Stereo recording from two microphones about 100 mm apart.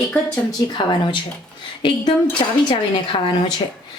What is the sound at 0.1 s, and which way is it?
Speech, 10° left (ahead or behind).